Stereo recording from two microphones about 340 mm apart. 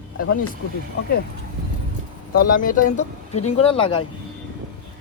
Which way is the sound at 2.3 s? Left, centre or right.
Left.